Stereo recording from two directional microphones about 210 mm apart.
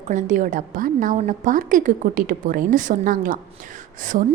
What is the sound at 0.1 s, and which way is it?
A woman's voice, 35° right (ahead or behind).